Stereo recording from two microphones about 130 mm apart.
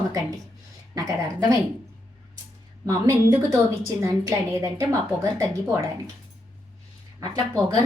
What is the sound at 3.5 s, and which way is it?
A woman's voice, 25° right (ahead or behind).